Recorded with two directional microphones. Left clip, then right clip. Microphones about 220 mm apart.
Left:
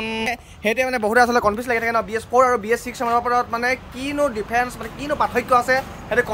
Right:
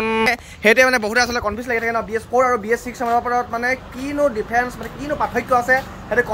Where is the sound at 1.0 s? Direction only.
30° left (ahead or behind).